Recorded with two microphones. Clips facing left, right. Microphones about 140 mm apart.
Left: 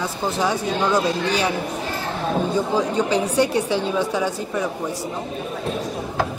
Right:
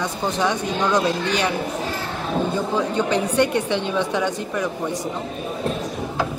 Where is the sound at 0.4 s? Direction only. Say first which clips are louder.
Left 1 dB; 10° left (ahead or behind).